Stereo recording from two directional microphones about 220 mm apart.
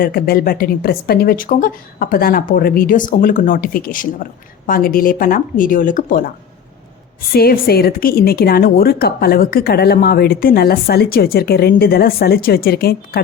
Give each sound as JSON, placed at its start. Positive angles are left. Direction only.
{"t": 0.0, "sound": "speech", "side_deg": 45}
{"t": 7.3, "sound": "a woman's voice", "side_deg": 45}